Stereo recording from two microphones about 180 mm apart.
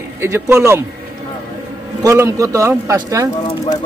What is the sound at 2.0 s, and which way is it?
A man's voice, 15° right (ahead or behind).